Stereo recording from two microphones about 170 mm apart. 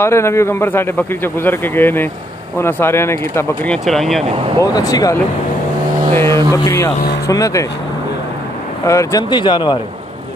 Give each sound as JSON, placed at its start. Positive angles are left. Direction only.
{"t": 0.0, "sound": "speech", "side_deg": 15}
{"t": 3.7, "sound": "speech", "side_deg": 0}
{"t": 4.7, "sound": "speech", "side_deg": 20}
{"t": 8.8, "sound": "speech", "side_deg": 20}